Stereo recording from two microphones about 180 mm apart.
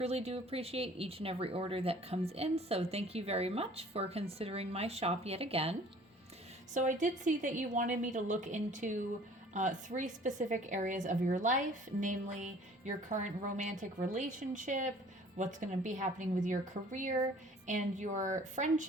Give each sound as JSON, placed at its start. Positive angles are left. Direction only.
{"t": 0.0, "sound": "speech", "side_deg": -35}
{"t": 6.7, "sound": "a woman's voice", "side_deg": -45}